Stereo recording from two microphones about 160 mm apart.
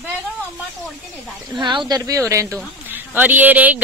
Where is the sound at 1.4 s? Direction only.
30° right (ahead or behind).